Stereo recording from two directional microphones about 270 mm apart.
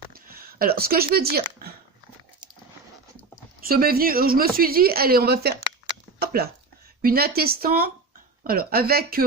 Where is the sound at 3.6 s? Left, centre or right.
Right.